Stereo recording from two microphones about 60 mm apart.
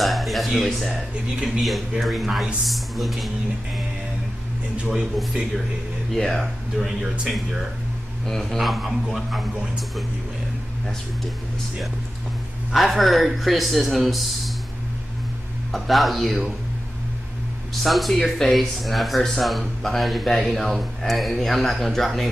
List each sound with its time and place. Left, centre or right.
0.0 s speech: centre
4.8 s speech: centre
6.1 s speech: centre
12.7 s speech: centre
15.7 s speech: centre
17.8 s speech: centre